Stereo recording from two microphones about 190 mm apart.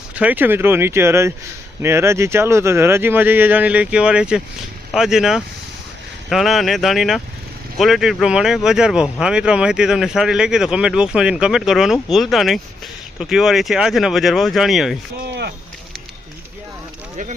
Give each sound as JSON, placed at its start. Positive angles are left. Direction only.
{"t": 0.2, "sound": "speech", "side_deg": -10}
{"t": 15.2, "sound": "speech", "side_deg": -60}